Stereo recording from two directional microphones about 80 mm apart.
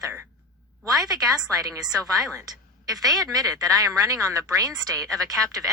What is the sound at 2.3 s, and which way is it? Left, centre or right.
A woman's voice, right.